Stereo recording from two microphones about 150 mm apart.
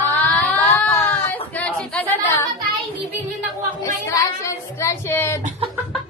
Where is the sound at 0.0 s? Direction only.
10° left (ahead or behind).